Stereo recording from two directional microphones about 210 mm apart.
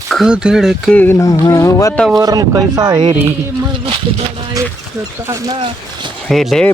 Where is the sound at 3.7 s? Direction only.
25° right (ahead or behind).